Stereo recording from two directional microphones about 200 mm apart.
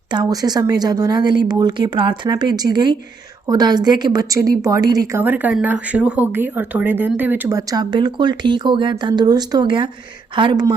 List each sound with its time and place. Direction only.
0.1 s a woman's voice: 20° right (ahead or behind)